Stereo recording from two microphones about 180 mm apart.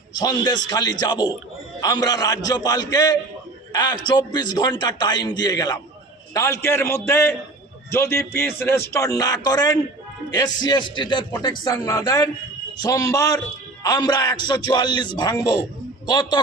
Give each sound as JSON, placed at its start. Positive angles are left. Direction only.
{"t": 0.1, "sound": "a man's voice", "side_deg": 20}